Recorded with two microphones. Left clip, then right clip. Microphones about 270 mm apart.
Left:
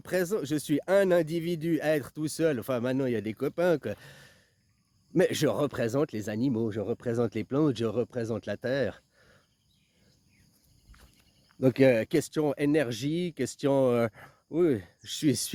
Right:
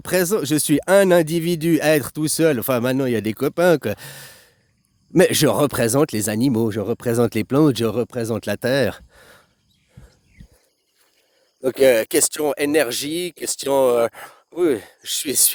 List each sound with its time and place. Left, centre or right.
0.0 s speech: right
11.6 s speech: right